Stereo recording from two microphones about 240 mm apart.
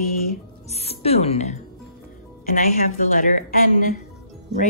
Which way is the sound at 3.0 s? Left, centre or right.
Left.